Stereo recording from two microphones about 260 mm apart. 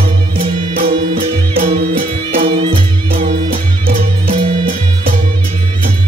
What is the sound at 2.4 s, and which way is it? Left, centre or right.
Music, centre.